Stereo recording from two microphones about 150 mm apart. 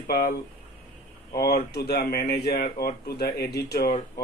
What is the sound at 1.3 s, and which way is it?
Speech, 90° left.